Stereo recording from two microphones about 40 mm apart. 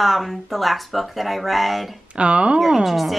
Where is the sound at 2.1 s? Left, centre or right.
Right.